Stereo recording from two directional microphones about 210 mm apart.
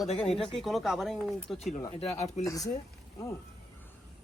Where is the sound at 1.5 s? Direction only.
35° left (ahead or behind).